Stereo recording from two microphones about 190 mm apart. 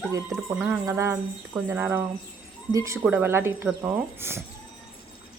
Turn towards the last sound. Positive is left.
turn(degrees=-10)  # may be behind; listen again after turning